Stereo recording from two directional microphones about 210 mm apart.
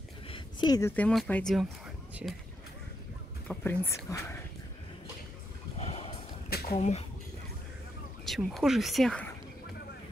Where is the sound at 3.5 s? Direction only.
10° left (ahead or behind).